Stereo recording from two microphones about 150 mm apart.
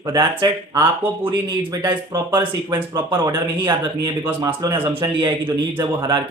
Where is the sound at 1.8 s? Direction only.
30° right (ahead or behind).